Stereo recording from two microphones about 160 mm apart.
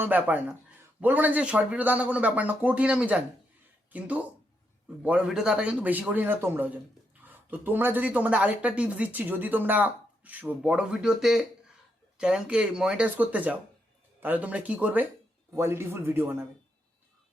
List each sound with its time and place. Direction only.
0.0 s speech: 10° right (ahead or behind)